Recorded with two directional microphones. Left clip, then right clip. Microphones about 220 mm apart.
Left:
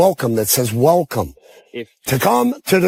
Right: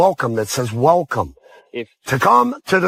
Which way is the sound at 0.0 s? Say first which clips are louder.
Left 1 dB; 55° left (ahead or behind).